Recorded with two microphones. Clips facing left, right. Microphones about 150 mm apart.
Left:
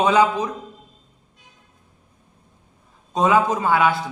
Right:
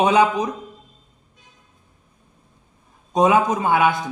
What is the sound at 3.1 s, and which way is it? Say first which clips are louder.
A man's voice: right 1 dB; 15° right (ahead or behind).